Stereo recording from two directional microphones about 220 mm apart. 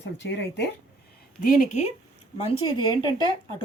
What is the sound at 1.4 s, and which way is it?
Speech, 35° left (ahead or behind).